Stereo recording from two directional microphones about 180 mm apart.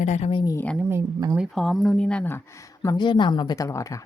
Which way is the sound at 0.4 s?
10° left (ahead or behind).